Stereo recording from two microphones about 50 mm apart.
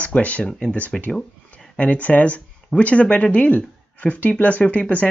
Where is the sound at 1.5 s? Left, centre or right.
Left.